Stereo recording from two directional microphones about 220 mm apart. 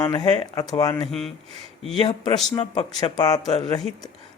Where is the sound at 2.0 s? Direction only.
20° left (ahead or behind).